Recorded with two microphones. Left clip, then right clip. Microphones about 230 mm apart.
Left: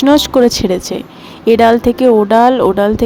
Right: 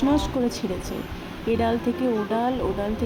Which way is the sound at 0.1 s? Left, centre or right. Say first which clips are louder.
Left 15 dB; left.